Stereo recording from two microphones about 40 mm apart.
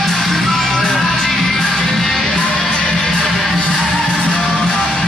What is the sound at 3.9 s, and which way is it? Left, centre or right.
Music, left.